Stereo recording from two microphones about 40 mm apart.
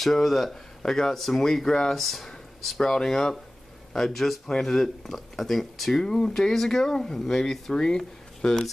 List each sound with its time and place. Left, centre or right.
0.0 s speech: centre
2.8 s speech: centre